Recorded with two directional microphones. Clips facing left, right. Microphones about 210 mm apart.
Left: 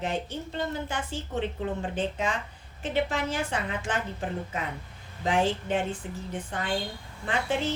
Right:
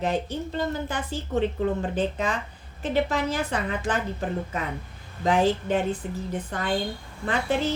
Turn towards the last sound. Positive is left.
turn(degrees=-40)  # may be behind; listen again after turning